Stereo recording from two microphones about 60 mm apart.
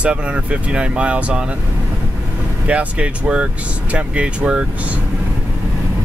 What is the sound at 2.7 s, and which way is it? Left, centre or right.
Speech, right.